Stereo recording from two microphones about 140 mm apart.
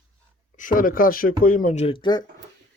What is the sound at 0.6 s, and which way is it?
Speech, 75° left (ahead or behind).